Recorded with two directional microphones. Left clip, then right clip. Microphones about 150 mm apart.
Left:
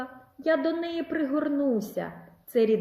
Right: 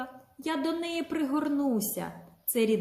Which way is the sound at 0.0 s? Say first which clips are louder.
Left 6 dB; 25° right (ahead or behind).